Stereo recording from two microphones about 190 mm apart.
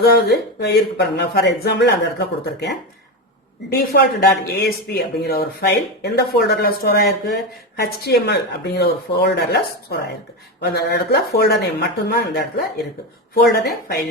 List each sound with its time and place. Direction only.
0.0 s speech: 60° left (ahead or behind)
3.8 s speech: 55° left (ahead or behind)
10.6 s speech: 60° left (ahead or behind)